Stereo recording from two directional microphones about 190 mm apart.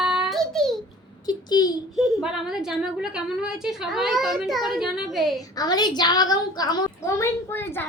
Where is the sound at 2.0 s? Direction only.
Centre (ahead or behind).